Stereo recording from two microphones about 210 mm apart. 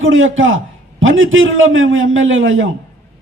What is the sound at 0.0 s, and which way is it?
A man's voice, 65° right (ahead or behind).